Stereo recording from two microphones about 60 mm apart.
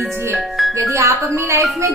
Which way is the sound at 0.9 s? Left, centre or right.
Right.